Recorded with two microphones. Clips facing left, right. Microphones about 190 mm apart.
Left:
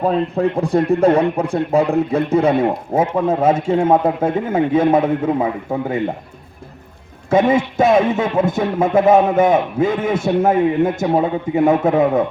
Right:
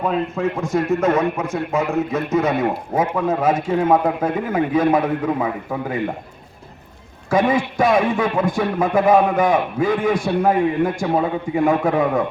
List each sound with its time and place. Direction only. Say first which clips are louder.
0.0 s a man's voice: left 4 dB; 35° left (ahead or behind)
7.3 s a man's voice: left 3 dB; 25° left (ahead or behind)